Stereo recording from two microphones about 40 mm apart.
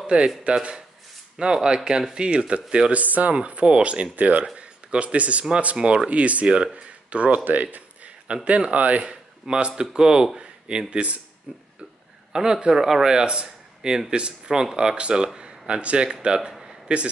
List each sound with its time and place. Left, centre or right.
0.0 s speech: right
3.0 s speech: right
4.1 s speech: right
6.0 s speech: right
7.4 s speech: right
8.5 s speech: right
9.1 s speech: right
11.5 s speech: centre
15.0 s speech: right